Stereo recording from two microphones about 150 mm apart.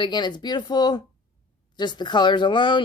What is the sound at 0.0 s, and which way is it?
Speech, 30° left (ahead or behind).